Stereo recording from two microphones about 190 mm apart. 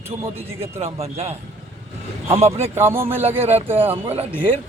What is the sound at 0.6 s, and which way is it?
Speech, 30° right (ahead or behind).